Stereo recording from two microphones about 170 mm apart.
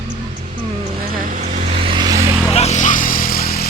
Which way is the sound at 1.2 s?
55° right (ahead or behind).